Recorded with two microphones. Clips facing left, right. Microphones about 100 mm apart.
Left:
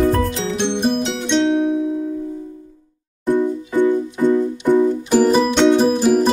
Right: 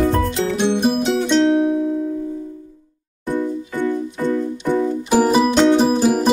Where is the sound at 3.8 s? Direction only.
20° left (ahead or behind).